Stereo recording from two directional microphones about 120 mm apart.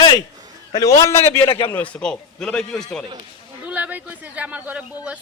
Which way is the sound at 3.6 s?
10° right (ahead or behind).